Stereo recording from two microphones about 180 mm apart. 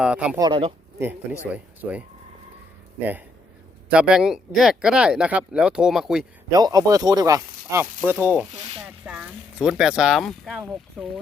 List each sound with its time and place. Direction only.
0.0 s speech: 5° right (ahead or behind)
0.3 s speech: 20° right (ahead or behind)
1.5 s speech: 10° right (ahead or behind)
3.9 s speech: 5° right (ahead or behind)
6.5 s speech: 20° right (ahead or behind)
8.5 s a sound: 35° right (ahead or behind)
9.0 s speech: 5° right (ahead or behind)